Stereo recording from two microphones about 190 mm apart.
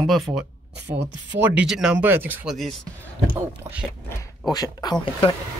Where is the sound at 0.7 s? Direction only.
65° right (ahead or behind).